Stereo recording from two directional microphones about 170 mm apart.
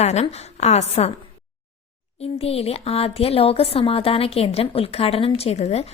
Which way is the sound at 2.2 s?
35° left (ahead or behind).